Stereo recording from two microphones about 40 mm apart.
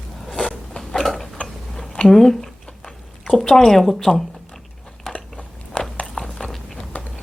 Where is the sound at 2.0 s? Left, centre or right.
Centre.